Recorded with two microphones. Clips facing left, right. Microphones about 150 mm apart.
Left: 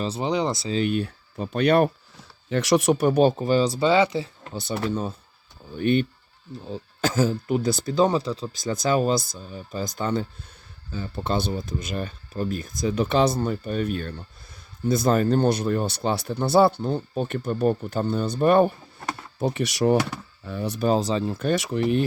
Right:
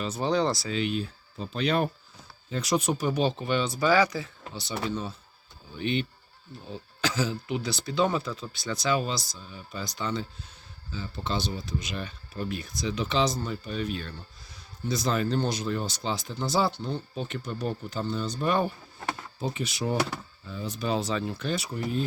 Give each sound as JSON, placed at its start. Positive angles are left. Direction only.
{"t": 0.2, "sound": "speech", "side_deg": 20}
{"t": 0.8, "sound": "speech", "side_deg": 55}
{"t": 2.5, "sound": "speech", "side_deg": 85}
{"t": 4.5, "sound": "speech", "side_deg": 50}
{"t": 8.7, "sound": "speech", "side_deg": 45}
{"t": 19.4, "sound": "speech", "side_deg": 70}
{"t": 20.8, "sound": "speech", "side_deg": 40}
{"t": 21.5, "sound": "speech", "side_deg": 85}